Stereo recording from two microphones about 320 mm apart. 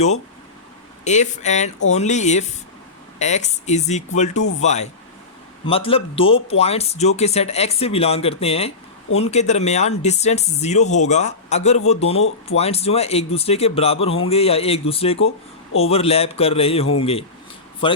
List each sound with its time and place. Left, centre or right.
1.0 s a man's voice: left